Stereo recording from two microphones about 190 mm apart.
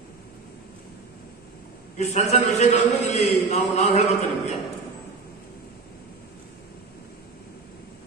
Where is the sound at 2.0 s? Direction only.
35° left (ahead or behind).